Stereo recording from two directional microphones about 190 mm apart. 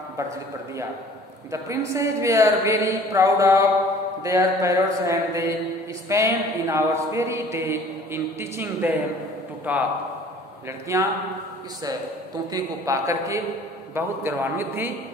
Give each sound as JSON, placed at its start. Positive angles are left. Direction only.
{"t": 1.5, "sound": "a woman's voice", "side_deg": -15}
{"t": 10.9, "sound": "a woman's voice", "side_deg": -15}
{"t": 12.5, "sound": "a woman's voice", "side_deg": -15}